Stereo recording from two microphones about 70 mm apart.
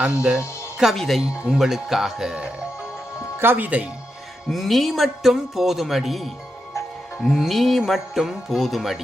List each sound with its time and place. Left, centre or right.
0.0 s speech: centre
0.9 s speech: centre
1.4 s speech: centre
3.4 s speech: right
4.5 s speech: centre